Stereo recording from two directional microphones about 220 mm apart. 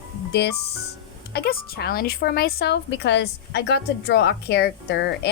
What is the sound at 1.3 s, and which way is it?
A woman's voice, 45° left (ahead or behind).